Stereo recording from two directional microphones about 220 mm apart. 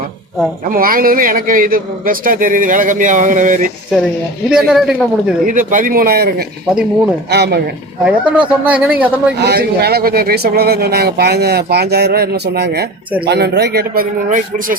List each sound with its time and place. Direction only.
0.7 s a man's voice: 40° right (ahead or behind)
4.4 s speech: 5° right (ahead or behind)
5.5 s a man's voice: 35° right (ahead or behind)
6.7 s speech: 5° right (ahead or behind)
7.3 s speech: 50° right (ahead or behind)
8.0 s speech: 5° right (ahead or behind)
9.4 s speech: 45° right (ahead or behind)